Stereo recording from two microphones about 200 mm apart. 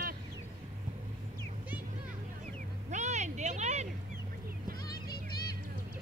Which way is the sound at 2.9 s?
35° right (ahead or behind).